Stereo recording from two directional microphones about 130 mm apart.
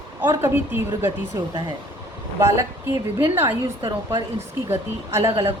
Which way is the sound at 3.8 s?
30° right (ahead or behind).